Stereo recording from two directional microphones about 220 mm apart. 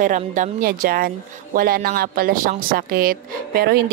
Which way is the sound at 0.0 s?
35° right (ahead or behind).